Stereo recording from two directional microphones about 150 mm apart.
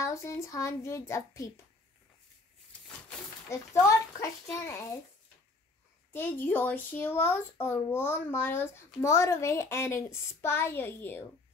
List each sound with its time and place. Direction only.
0.0 s a child's voice: 20° left (ahead or behind)
2.7 s a sound: 5° left (ahead or behind)
3.4 s a child's voice: 20° left (ahead or behind)
6.1 s speech: 15° left (ahead or behind)